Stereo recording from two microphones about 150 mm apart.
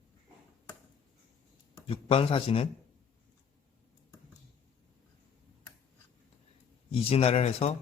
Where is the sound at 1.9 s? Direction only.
40° left (ahead or behind).